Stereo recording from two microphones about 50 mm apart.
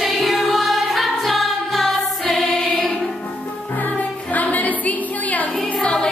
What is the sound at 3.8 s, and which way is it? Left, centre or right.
Music, left.